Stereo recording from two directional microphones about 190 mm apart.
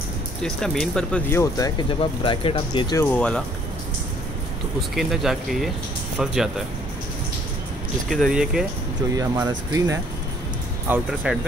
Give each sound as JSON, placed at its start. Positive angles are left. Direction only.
{"t": 0.6, "sound": "speech", "side_deg": 5}
{"t": 2.0, "sound": "speech", "side_deg": 30}
{"t": 3.1, "sound": "speech", "side_deg": 5}
{"t": 4.7, "sound": "speech", "side_deg": 0}
{"t": 8.1, "sound": "speech", "side_deg": 0}
{"t": 9.1, "sound": "speech", "side_deg": -20}
{"t": 10.9, "sound": "speech", "side_deg": -5}